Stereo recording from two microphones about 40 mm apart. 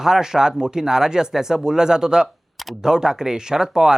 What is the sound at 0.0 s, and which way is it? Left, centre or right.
Speech, centre.